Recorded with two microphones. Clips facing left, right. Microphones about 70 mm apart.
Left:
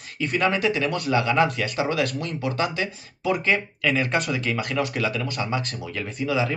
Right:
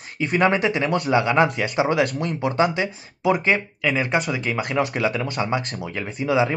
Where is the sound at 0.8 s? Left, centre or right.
Right.